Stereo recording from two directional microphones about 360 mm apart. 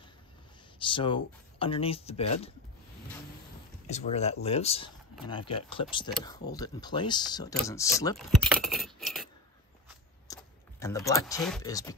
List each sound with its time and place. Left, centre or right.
0.7 s speech: centre
3.8 s speech: centre
8.6 s glass: centre
10.2 s speech: centre